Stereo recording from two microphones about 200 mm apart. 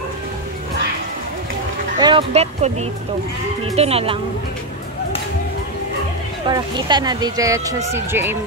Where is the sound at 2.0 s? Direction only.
25° right (ahead or behind).